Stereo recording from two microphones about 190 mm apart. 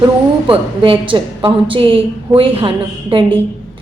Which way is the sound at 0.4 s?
25° right (ahead or behind).